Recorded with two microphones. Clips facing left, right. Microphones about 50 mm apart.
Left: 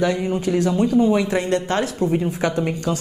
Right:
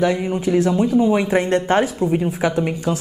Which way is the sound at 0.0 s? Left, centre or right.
Centre.